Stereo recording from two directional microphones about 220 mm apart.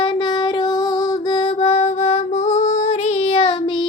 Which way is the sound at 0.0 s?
20° left (ahead or behind).